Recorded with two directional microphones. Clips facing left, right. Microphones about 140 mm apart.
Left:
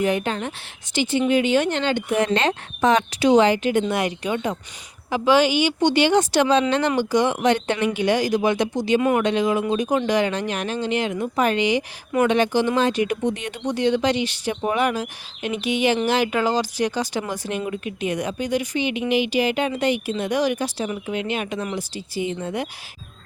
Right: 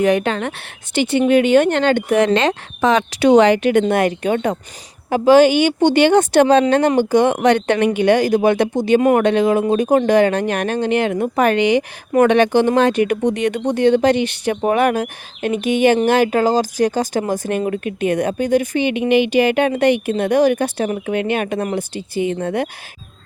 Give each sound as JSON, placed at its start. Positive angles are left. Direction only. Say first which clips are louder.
{"t": 0.0, "sound": "speech", "louder": "right 6 dB", "side_deg": -70}
{"t": 3.1, "sound": "speech", "louder": "right 7 dB", "side_deg": -65}
{"t": 13.7, "sound": "speech", "louder": "right 5 dB", "side_deg": -55}